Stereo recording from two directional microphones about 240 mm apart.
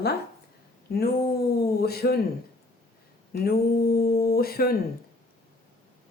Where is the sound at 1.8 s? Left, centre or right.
Left.